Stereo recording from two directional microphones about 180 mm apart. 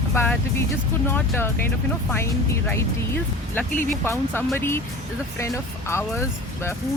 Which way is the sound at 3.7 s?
50° left (ahead or behind).